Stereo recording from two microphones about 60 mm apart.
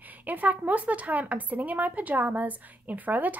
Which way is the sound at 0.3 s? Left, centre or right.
Right.